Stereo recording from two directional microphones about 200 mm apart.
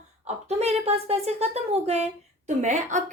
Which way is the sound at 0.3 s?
30° right (ahead or behind).